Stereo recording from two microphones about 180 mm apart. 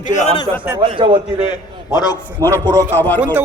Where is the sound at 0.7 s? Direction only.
30° right (ahead or behind).